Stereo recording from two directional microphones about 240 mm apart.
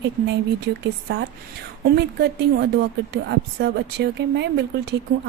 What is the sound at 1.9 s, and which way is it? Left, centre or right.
A woman's voice, right.